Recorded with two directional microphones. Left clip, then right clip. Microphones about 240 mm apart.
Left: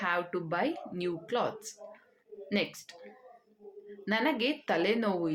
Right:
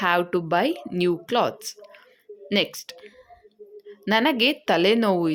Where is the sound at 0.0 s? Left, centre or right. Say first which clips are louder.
Right 10 dB; right.